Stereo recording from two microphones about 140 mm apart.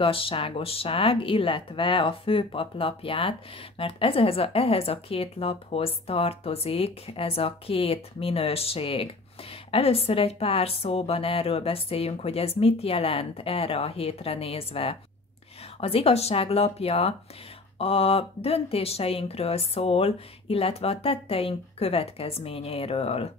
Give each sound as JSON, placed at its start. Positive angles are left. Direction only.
{"t": 0.0, "sound": "speech", "side_deg": 40}